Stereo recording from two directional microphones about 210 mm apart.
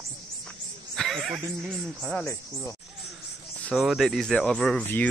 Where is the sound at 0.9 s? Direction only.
Centre (ahead or behind).